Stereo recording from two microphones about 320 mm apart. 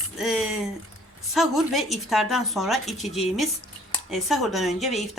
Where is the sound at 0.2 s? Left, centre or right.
Centre.